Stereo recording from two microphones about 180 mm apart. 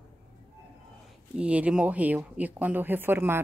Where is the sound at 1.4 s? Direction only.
5° right (ahead or behind).